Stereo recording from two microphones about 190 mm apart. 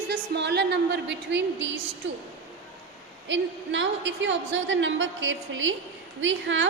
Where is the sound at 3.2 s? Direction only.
75° right (ahead or behind).